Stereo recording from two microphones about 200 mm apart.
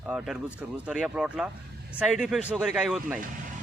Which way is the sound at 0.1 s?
5° right (ahead or behind).